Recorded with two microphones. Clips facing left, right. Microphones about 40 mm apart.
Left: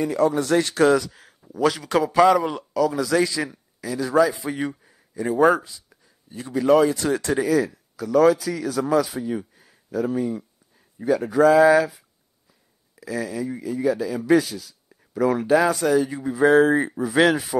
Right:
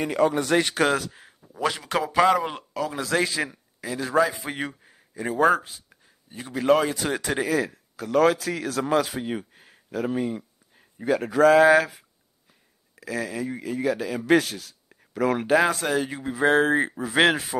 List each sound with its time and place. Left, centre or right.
0.0 s speech: right
1.8 s a man's voice: centre
2.5 s a man's voice: right
5.2 s speech: centre
5.9 s a sound: right
6.5 s speech: right
7.3 s a man's voice: right